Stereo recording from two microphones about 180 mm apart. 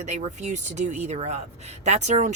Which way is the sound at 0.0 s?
40° right (ahead or behind).